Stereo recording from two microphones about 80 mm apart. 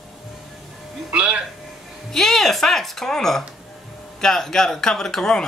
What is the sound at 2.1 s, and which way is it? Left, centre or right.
Speech, centre.